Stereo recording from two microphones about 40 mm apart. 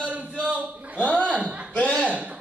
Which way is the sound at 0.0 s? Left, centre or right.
Right.